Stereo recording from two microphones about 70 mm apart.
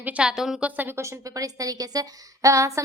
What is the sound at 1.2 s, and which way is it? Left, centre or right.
A woman's voice, right.